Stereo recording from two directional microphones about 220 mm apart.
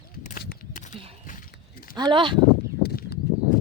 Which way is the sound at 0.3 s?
40° left (ahead or behind).